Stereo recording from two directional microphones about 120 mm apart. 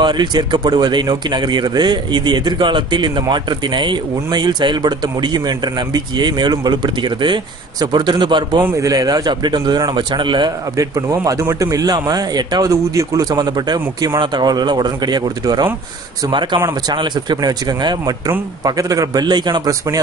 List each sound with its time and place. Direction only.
0.0 s speech: 35° right (ahead or behind)
8.6 s speech: 25° right (ahead or behind)
10.8 s speech: 30° right (ahead or behind)